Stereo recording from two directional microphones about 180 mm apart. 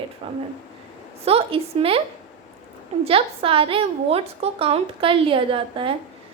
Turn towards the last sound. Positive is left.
turn(degrees=-30)  # may be behind; listen again after turning